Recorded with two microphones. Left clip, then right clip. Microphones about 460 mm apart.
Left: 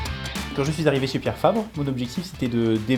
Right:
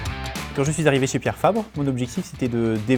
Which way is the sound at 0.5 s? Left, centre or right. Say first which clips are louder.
Right 2 dB; right.